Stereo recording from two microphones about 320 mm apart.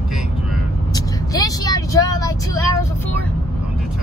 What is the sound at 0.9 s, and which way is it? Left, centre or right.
Vehicle, centre.